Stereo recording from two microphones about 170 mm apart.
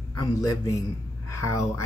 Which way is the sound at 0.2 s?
20° left (ahead or behind).